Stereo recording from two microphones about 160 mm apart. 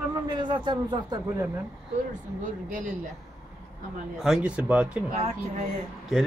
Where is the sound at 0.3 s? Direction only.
30° right (ahead or behind).